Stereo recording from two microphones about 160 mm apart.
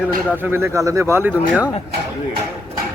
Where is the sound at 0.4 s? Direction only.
15° right (ahead or behind).